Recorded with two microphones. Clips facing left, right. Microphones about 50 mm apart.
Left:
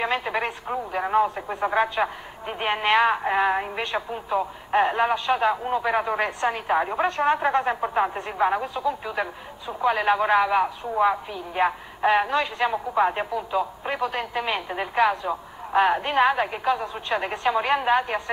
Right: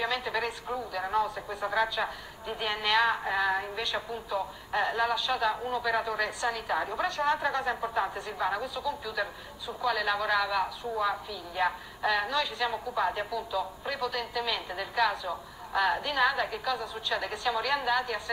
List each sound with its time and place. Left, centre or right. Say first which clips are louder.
0.0 s speech: left 5 dB; left